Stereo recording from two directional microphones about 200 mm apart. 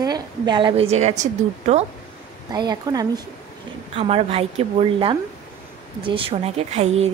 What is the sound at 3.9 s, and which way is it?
A woman's voice, 30° right (ahead or behind).